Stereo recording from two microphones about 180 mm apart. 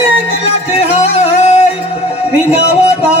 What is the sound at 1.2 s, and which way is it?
Music, 40° left (ahead or behind).